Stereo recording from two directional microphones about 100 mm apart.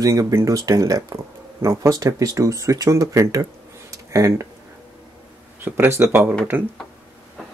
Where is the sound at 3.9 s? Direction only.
35° right (ahead or behind).